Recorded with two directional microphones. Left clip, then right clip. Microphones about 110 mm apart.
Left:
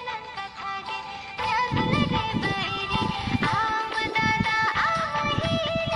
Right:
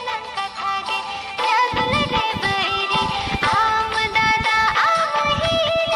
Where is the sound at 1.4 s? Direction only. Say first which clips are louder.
Right 7 dB; 90° right.